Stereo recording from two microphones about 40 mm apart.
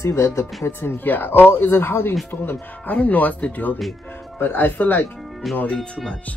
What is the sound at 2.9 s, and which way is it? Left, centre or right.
Speech, left.